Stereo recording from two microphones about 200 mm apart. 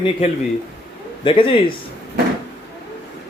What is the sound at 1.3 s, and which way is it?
Speech, 25° left (ahead or behind).